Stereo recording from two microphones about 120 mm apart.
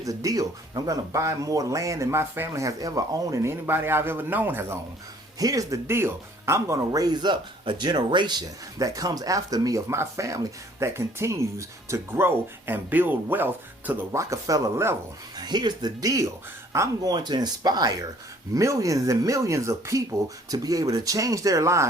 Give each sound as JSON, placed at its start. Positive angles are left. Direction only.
{"t": 0.0, "sound": "speech", "side_deg": -30}
{"t": 5.4, "sound": "speech", "side_deg": -30}
{"t": 15.4, "sound": "speech", "side_deg": -35}